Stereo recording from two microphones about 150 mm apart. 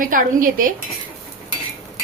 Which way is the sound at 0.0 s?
65° right (ahead or behind).